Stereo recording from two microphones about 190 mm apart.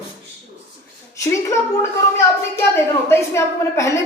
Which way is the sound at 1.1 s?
15° left (ahead or behind).